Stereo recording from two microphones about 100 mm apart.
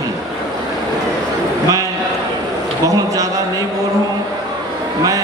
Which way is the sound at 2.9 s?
35° right (ahead or behind).